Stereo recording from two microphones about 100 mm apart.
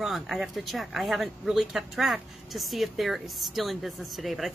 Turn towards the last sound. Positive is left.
turn(degrees=0)  # may be behind; listen again after turning